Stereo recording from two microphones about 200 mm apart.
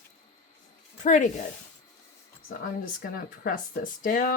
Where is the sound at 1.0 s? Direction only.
40° left (ahead or behind).